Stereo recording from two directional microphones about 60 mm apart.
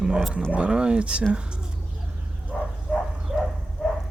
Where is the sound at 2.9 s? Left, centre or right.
Centre.